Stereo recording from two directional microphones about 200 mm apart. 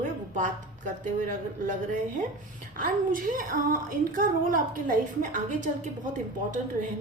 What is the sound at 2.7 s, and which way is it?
A woman's voice, 40° right (ahead or behind).